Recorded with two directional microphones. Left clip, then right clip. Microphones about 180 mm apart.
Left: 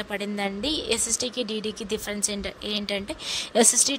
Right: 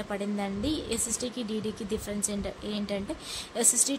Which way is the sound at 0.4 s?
45° left (ahead or behind).